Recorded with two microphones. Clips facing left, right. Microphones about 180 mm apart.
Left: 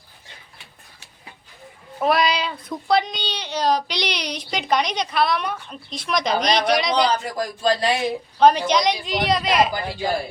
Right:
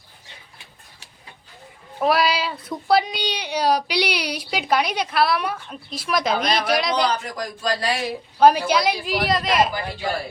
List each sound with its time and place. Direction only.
2.0 s a woman's voice: 5° right (ahead or behind)
7.3 s speech: 25° left (ahead or behind)
8.4 s a woman's voice: 5° right (ahead or behind)